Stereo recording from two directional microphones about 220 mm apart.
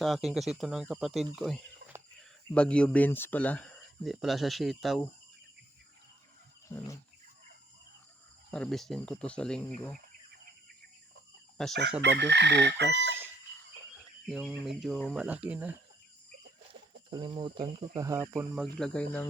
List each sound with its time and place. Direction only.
0.0 s speech: centre (ahead or behind)
6.7 s wild animals: 15° left (ahead or behind)
8.4 s speech: 5° left (ahead or behind)
11.6 s speech: centre (ahead or behind)
12.0 s chicken: 50° right (ahead or behind)
14.3 s speech: centre (ahead or behind)
17.1 s speech: 20° right (ahead or behind); by 19.3 s 5° left (ahead or behind)